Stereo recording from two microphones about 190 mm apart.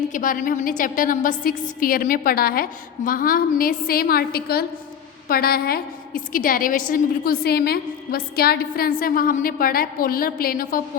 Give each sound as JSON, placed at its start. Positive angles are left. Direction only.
{"t": 0.1, "sound": "a woman's voice", "side_deg": 45}